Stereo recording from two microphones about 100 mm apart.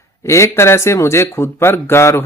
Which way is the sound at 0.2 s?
30° left (ahead or behind).